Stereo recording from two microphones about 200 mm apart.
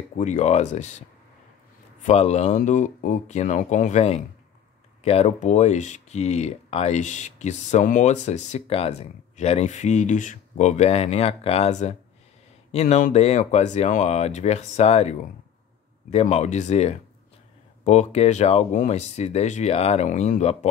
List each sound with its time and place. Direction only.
0.2 s speech: 35° left (ahead or behind)
2.0 s speech: 35° left (ahead or behind)